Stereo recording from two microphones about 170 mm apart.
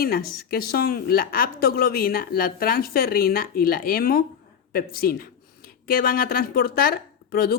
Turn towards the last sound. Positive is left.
turn(degrees=65)  # may be behind; listen again after turning